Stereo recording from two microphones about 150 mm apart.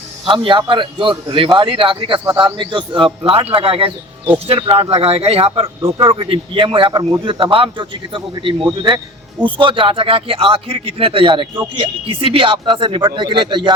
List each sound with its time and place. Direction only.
0.3 s a man's voice: 35° right (ahead or behind)